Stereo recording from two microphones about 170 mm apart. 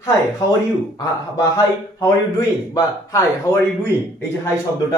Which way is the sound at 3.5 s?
20° left (ahead or behind).